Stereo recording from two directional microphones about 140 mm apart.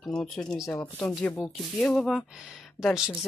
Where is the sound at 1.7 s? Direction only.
5° left (ahead or behind).